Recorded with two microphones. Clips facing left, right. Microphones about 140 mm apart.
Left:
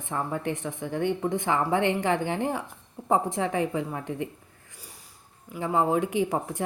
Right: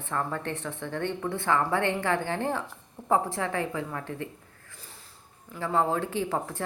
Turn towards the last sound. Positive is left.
turn(degrees=15)  # may be behind; listen again after turning